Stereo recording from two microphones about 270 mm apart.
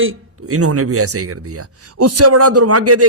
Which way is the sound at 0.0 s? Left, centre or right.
Right.